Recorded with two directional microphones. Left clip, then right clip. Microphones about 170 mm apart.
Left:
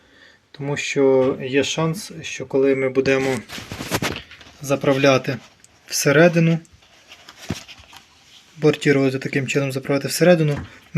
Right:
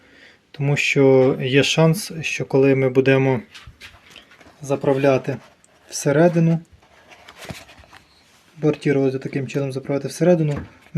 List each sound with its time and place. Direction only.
0.5 s speech: 30° right (ahead or behind)
4.6 s speech: centre (ahead or behind)
8.6 s speech: centre (ahead or behind)